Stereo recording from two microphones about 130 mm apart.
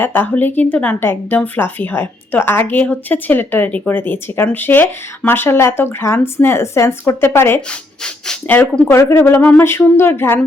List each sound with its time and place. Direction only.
0.0 s speech: 15° left (ahead or behind)